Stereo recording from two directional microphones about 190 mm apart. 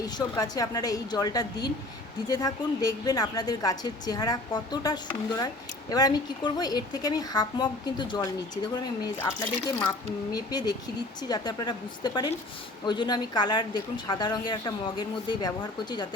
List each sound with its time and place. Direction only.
0.0 s a woman's voice: 20° left (ahead or behind)
10.3 s a woman's voice: 20° left (ahead or behind)